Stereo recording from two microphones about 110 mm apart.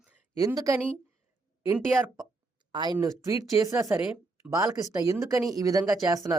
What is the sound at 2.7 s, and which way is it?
Speech, 40° right (ahead or behind).